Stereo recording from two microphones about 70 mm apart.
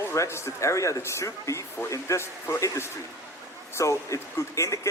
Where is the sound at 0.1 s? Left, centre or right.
Left.